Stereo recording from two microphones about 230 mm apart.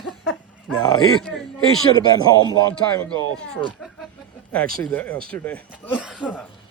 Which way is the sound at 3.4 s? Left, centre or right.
Centre.